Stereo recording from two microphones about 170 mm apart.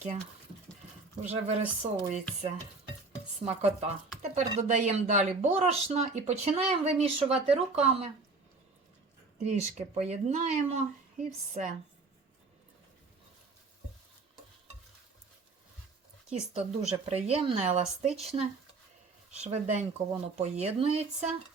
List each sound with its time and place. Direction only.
1.2 s speech: 45° right (ahead or behind)
3.5 s speech: 40° right (ahead or behind)
9.4 s speech: 40° right (ahead or behind)
16.3 s speech: 40° right (ahead or behind)